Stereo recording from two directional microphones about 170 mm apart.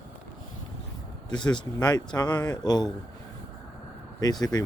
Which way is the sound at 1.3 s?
25° left (ahead or behind).